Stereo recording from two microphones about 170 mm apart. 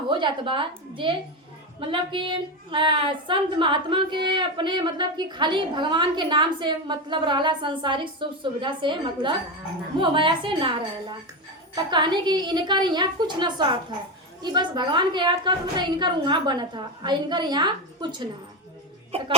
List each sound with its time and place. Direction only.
0.1 s a woman's voice: 30° right (ahead or behind)